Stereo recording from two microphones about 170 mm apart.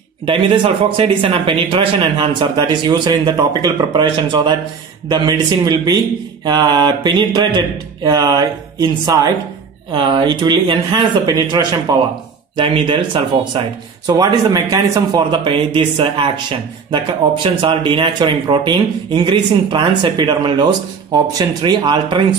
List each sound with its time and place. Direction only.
0.3 s speech: 30° right (ahead or behind)